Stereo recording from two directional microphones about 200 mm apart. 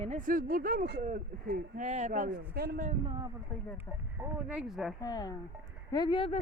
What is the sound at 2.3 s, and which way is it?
Speech, 50° right (ahead or behind).